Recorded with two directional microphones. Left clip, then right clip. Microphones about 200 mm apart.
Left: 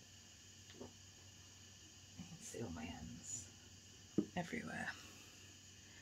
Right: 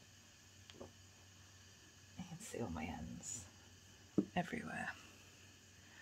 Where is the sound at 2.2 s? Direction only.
50° right (ahead or behind).